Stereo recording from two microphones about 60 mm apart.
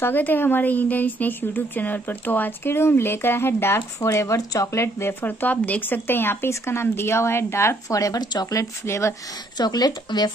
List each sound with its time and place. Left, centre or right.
0.0 s speech: left
4.0 s speech: left
5.2 s speech: left
6.5 s speech: left
7.9 s speech: left
8.8 s speech: left
9.7 s speech: left